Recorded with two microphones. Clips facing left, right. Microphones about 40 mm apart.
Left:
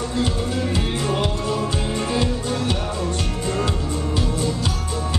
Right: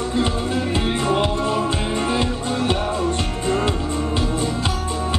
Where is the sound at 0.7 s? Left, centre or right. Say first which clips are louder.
Right 3 dB; right.